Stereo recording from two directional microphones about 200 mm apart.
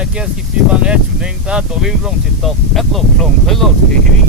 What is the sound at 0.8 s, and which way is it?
Speech, 5° right (ahead or behind).